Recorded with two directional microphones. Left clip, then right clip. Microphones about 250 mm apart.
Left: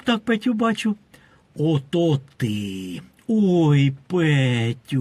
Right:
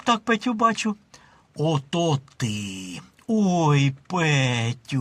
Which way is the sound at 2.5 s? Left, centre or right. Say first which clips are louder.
Left 3 dB; right.